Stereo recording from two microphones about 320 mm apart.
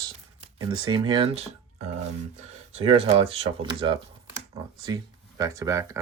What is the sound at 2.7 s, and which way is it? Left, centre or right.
Speech, centre.